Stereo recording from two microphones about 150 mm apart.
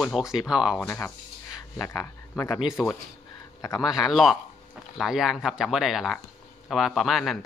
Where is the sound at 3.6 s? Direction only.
25° left (ahead or behind).